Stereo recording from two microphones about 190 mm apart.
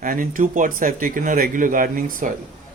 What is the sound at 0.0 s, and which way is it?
Speech, 45° right (ahead or behind).